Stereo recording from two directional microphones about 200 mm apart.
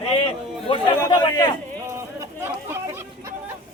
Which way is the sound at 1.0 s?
20° left (ahead or behind).